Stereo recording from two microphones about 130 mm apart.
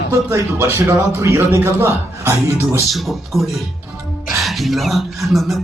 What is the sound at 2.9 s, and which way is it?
Speech, centre (ahead or behind).